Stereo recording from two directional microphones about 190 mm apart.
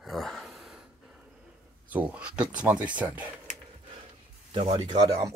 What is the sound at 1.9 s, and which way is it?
Speech, 5° right (ahead or behind).